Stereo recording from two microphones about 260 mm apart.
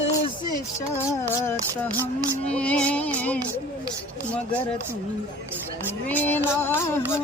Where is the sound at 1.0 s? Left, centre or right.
Centre.